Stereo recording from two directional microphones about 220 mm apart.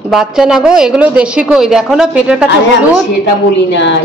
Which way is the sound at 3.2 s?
55° left (ahead or behind).